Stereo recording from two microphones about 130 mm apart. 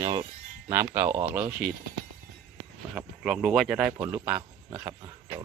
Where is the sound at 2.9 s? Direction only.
5° right (ahead or behind).